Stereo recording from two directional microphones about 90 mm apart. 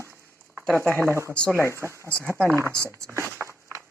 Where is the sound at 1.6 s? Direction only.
30° right (ahead or behind).